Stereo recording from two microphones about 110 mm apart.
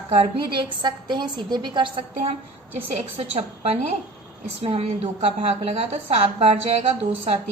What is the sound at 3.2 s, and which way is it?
A woman's voice, 65° right (ahead or behind).